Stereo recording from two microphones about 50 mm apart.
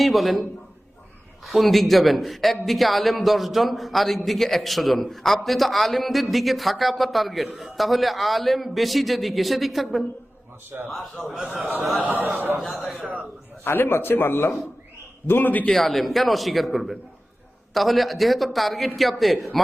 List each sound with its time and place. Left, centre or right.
0.0 s a man's voice: centre
1.5 s a man's voice: centre
12.0 s speech: right
12.6 s a man's voice: centre
13.0 s speech: right
13.7 s a man's voice: left
15.7 s a man's voice: centre